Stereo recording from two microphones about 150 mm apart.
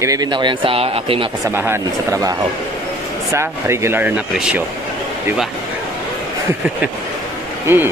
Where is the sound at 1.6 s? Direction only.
20° right (ahead or behind).